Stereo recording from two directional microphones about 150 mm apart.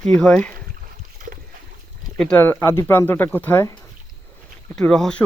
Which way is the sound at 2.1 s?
5° left (ahead or behind).